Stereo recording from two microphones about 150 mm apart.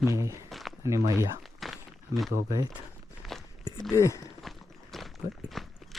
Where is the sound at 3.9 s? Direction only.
20° left (ahead or behind).